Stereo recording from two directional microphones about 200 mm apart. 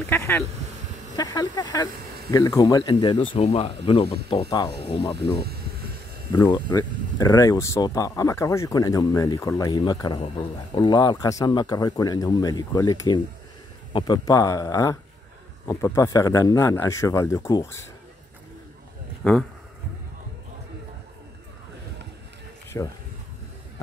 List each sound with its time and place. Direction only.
0.0 s speech: 10° left (ahead or behind)
6.3 s speech: 20° left (ahead or behind)
19.2 s speech: 5° left (ahead or behind)
22.7 s speech: 15° left (ahead or behind)